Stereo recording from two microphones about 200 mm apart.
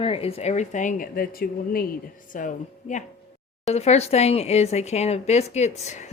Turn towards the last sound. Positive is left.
turn(degrees=35)  # may be behind; listen again after turning